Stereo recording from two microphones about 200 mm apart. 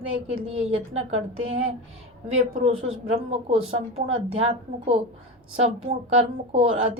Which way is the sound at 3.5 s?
30° right (ahead or behind).